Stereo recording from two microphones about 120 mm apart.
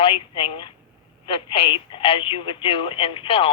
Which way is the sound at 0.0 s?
45° left (ahead or behind).